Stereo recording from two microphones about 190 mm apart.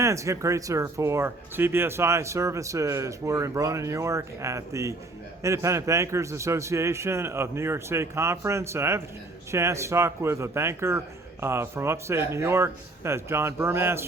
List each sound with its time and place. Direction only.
0.0 s speech: 15° right (ahead or behind)